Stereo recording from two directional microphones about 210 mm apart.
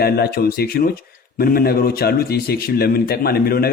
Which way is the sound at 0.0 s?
50° left (ahead or behind).